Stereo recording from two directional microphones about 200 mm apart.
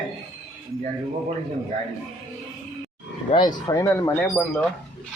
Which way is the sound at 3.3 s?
20° left (ahead or behind).